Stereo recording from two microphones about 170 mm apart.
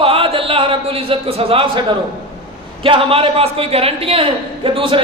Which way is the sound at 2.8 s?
30° right (ahead or behind).